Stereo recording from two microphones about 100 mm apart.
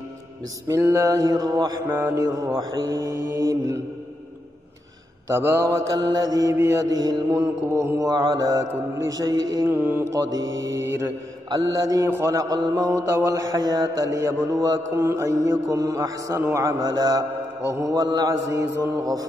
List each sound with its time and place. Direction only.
0.7 s a man's voice: 30° right (ahead or behind)
1.9 s mantra: 20° right (ahead or behind)
2.2 s a man's voice: 30° right (ahead or behind)
3.2 s mantra: 25° right (ahead or behind)
5.3 s a man's voice: 30° right (ahead or behind)
7.0 s mantra: 40° right (ahead or behind)
7.2 s mantra: 30° right (ahead or behind)
8.1 s a man's voice: 45° right (ahead or behind)
9.7 s mantra: 20° right (ahead or behind)
10.0 s a man's voice: 35° right (ahead or behind)
13.1 s a man's voice: 30° right (ahead or behind)